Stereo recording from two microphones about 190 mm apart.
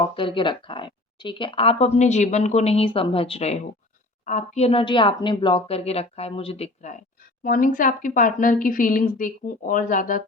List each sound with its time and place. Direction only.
0.0 s speech: 25° left (ahead or behind)
7.4 s a woman's voice: 45° left (ahead or behind)